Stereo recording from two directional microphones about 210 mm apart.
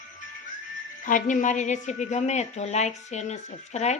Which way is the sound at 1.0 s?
35° left (ahead or behind).